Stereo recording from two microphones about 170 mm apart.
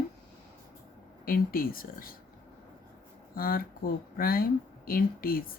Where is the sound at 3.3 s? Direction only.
60° left (ahead or behind).